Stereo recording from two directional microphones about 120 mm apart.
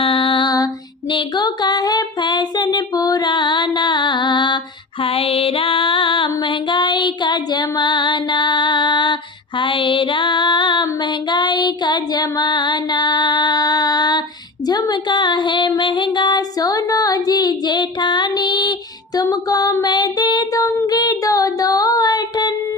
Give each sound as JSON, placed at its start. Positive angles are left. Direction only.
{"t": 0.0, "sound": "music", "side_deg": 45}
{"t": 1.1, "sound": "a sound", "side_deg": 35}
{"t": 5.0, "sound": "music", "side_deg": 50}
{"t": 9.6, "sound": "female singing", "side_deg": 45}
{"t": 14.7, "sound": "music", "side_deg": 35}
{"t": 19.1, "sound": "a sound", "side_deg": 30}